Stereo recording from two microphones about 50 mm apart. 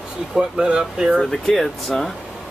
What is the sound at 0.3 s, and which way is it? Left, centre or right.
Speech, centre.